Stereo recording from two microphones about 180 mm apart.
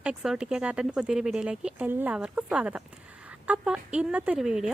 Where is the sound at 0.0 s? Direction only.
5° right (ahead or behind).